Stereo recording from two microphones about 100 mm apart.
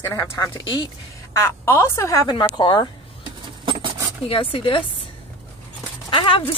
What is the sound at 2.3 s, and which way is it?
Speech, 50° left (ahead or behind).